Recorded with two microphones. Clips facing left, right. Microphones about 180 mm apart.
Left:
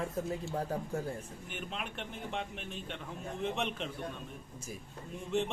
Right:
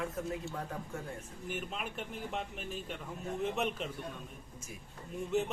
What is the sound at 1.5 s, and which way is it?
A man's voice, centre (ahead or behind).